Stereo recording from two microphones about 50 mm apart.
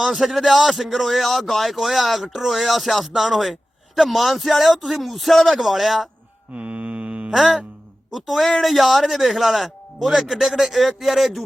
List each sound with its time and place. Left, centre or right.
0.0 s speech: centre
6.5 s mantra: right
7.3 s speech: centre